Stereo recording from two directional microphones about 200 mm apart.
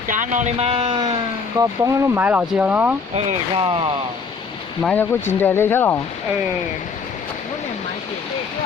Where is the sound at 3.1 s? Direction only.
30° right (ahead or behind).